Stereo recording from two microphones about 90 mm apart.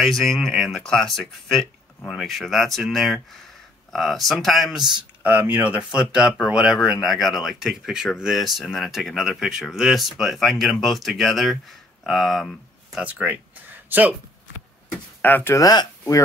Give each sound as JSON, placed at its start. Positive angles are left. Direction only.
{"t": 0.0, "sound": "speech", "side_deg": 0}
{"t": 5.2, "sound": "speech", "side_deg": -20}
{"t": 13.0, "sound": "speech", "side_deg": -20}
{"t": 15.2, "sound": "speech", "side_deg": 20}
{"t": 15.5, "sound": "speech", "side_deg": 45}